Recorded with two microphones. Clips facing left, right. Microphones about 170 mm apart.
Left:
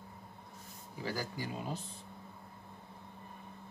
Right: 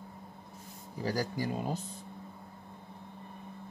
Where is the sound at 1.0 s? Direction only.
40° right (ahead or behind).